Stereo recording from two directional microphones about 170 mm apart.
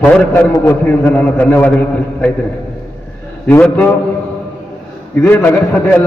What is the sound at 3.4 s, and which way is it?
Speech, 10° left (ahead or behind).